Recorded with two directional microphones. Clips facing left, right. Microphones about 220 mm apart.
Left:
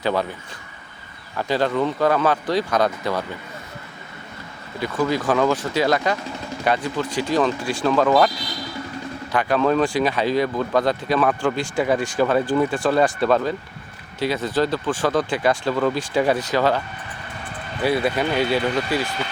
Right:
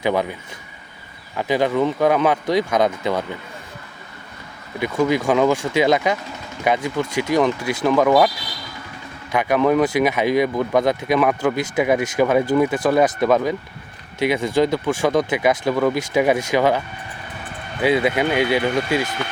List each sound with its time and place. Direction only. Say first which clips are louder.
0.0 s speech: right 2 dB; 15° right (ahead or behind)
1.4 s speech: right 2 dB; 15° right (ahead or behind)
4.8 s speech: right 3 dB; 15° right (ahead or behind)
9.3 s speech: right 2 dB; 15° right (ahead or behind)
17.8 s speech: right 3 dB; 15° right (ahead or behind)